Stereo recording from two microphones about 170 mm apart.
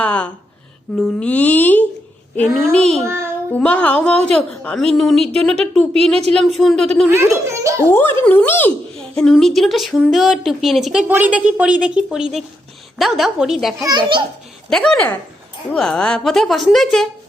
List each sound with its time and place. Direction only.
0.0 s a sound: 10° left (ahead or behind)
0.9 s a woman's voice: 5° left (ahead or behind)
7.1 s a child's voice: 15° right (ahead or behind)
7.9 s a woman's voice: 10° left (ahead or behind)
13.8 s a child's voice: 25° right (ahead or behind)
14.7 s a woman's voice: 5° left (ahead or behind)